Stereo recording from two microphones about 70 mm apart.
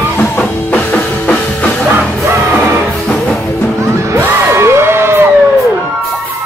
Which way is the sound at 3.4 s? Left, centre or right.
Left.